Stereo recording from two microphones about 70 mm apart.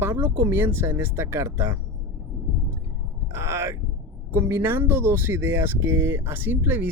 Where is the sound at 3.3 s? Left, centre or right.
Right.